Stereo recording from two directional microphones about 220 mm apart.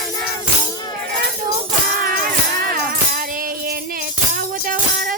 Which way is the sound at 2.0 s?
40° right (ahead or behind).